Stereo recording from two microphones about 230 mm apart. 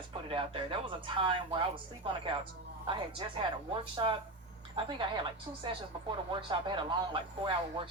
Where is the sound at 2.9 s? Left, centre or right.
Right.